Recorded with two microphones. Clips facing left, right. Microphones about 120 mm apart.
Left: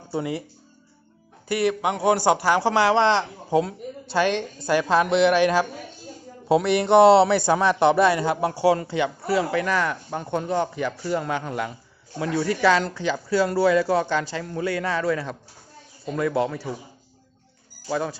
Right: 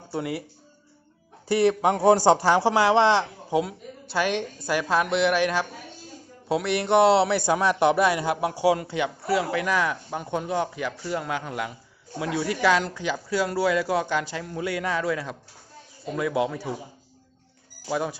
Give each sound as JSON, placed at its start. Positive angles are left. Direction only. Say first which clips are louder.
{"t": 0.1, "sound": "a man's voice", "louder": "left 2 dB", "side_deg": 0}
{"t": 1.5, "sound": "a man's voice", "louder": "right 2 dB", "side_deg": -30}
{"t": 3.5, "sound": "a woman's voice", "louder": "left 3 dB", "side_deg": -5}
{"t": 17.8, "sound": "speech", "louder": "left 1 dB", "side_deg": -5}